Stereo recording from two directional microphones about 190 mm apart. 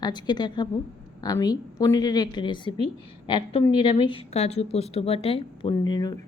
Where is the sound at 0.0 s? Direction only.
25° left (ahead or behind).